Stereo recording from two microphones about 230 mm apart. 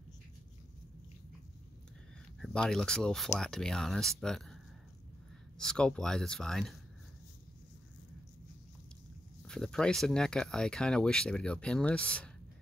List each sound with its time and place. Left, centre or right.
2.4 s speech: centre
5.6 s speech: centre
9.4 s speech: centre